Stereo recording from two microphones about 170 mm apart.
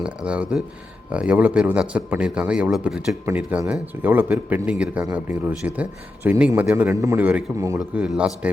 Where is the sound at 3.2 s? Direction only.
15° right (ahead or behind).